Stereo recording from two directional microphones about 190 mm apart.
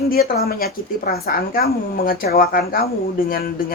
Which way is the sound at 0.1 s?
55° left (ahead or behind).